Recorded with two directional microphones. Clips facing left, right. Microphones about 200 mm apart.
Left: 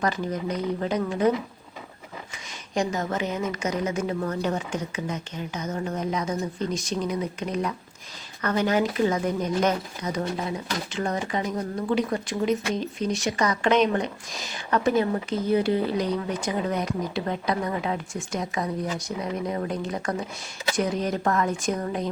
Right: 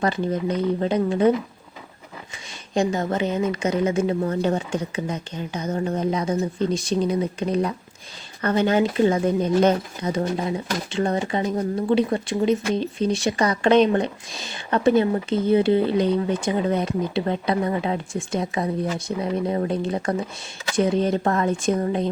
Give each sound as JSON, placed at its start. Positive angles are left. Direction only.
{"t": 0.0, "sound": "speech", "side_deg": -30}
{"t": 2.7, "sound": "speech", "side_deg": -30}